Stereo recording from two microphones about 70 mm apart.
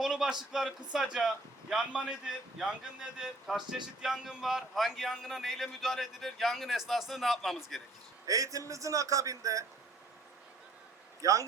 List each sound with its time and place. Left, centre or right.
0.0 s a sound: centre
0.9 s a man's voice: centre
8.3 s a man's voice: right
11.2 s a man's voice: right